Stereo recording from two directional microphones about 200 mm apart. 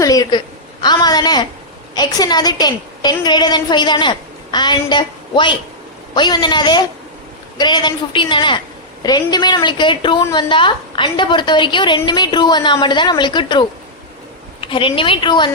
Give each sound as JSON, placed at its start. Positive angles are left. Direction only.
{"t": 0.0, "sound": "a woman's voice", "side_deg": 20}